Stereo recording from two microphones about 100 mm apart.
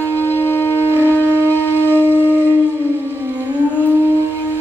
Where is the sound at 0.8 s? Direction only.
20° right (ahead or behind).